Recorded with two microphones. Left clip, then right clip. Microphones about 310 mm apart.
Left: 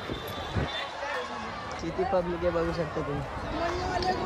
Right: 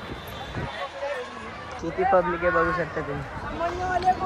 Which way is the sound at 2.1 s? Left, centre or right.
Centre.